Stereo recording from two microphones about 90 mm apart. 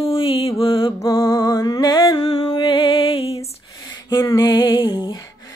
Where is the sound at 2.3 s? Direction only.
75° left (ahead or behind).